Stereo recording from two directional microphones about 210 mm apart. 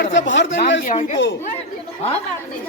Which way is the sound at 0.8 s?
35° left (ahead or behind).